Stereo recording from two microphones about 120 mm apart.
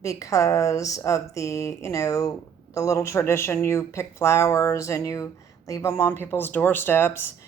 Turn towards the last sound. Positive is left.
turn(degrees=20)  # may be behind; listen again after turning